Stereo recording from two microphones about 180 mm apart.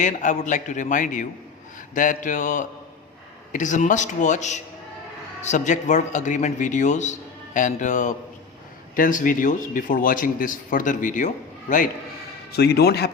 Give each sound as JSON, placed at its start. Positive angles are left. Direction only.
{"t": 0.0, "sound": "a man's voice", "side_deg": 45}
{"t": 12.5, "sound": "a man's voice", "side_deg": 60}